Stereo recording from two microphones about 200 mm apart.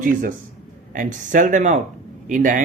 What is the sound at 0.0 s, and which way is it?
Speech, 40° right (ahead or behind).